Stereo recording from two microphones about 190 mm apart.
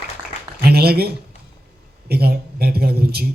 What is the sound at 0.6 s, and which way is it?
A man's voice, 55° right (ahead or behind).